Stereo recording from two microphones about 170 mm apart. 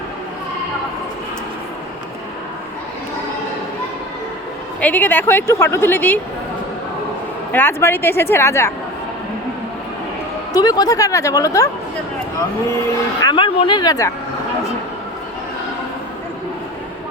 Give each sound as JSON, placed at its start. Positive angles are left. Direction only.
{"t": 4.8, "sound": "a woman's voice", "side_deg": 10}
{"t": 7.5, "sound": "a woman's voice", "side_deg": 15}
{"t": 10.5, "sound": "a woman's voice", "side_deg": 20}
{"t": 13.2, "sound": "speech", "side_deg": 30}